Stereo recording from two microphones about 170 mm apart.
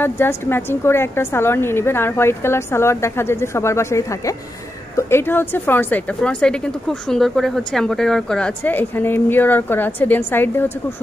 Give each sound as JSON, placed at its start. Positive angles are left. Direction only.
{"t": 0.0, "sound": "a woman's voice", "side_deg": 15}